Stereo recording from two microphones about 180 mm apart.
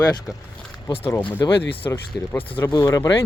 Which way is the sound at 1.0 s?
10° left (ahead or behind).